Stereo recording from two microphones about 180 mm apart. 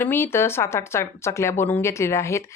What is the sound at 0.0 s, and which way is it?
Speech, 10° left (ahead or behind).